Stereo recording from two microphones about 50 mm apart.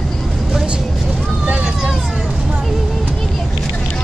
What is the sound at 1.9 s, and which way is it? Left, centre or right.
Vehicle, centre.